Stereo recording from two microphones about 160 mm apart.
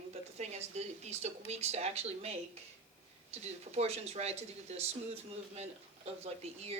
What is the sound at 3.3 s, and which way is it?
A man's voice, 40° right (ahead or behind).